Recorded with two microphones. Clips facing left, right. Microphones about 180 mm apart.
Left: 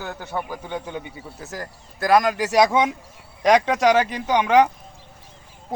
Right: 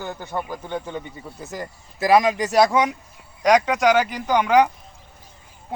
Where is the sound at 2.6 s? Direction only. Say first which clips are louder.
Even; 25° left (ahead or behind).